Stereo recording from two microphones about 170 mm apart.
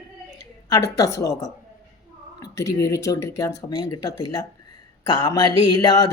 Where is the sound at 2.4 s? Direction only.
20° left (ahead or behind).